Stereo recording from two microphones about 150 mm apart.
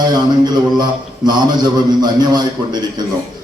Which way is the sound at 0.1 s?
30° right (ahead or behind).